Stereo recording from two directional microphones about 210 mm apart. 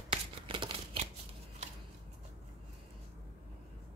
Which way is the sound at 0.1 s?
25° right (ahead or behind).